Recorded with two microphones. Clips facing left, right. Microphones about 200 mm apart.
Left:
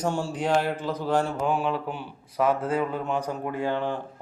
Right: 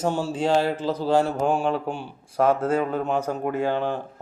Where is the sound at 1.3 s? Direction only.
45° right (ahead or behind).